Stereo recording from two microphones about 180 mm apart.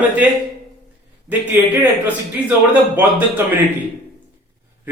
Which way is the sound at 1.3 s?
10° right (ahead or behind).